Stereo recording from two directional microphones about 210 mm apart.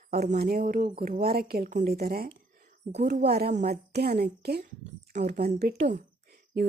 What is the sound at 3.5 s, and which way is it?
Speech, 35° right (ahead or behind).